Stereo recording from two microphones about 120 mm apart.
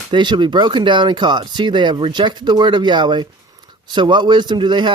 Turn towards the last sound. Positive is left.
turn(degrees=-40)  # may be behind; listen again after turning